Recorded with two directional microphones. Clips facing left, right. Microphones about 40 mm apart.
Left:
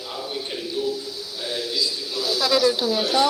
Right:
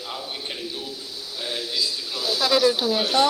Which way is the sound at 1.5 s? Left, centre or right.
Right.